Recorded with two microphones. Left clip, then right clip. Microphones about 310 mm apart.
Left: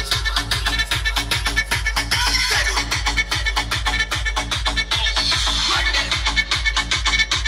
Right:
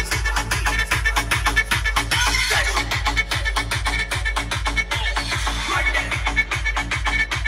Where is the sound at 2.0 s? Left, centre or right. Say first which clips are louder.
Left 2 dB; right.